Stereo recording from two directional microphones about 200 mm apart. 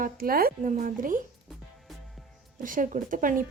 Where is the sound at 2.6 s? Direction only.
40° right (ahead or behind).